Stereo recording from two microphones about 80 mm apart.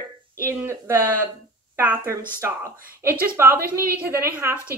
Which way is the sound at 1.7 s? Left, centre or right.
Centre.